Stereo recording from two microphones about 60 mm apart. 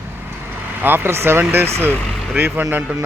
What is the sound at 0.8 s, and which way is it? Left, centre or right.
Speech, right.